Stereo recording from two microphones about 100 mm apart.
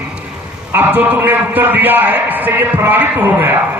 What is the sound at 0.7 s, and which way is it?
A man's voice, 20° right (ahead or behind).